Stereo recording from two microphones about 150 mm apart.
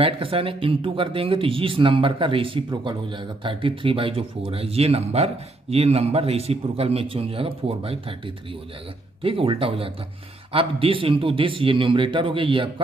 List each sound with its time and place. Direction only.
0.0 s speech: 35° right (ahead or behind)
9.2 s speech: 40° right (ahead or behind)